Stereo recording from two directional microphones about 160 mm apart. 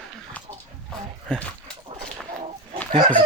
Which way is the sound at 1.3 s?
5° left (ahead or behind).